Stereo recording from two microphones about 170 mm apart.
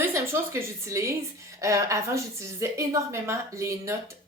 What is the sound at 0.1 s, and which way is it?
A woman's voice, 15° right (ahead or behind).